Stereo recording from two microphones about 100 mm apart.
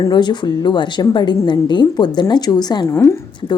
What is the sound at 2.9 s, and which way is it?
Speech, 30° left (ahead or behind).